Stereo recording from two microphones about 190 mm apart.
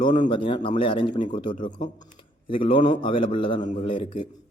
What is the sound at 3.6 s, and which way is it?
Speech, 40° left (ahead or behind).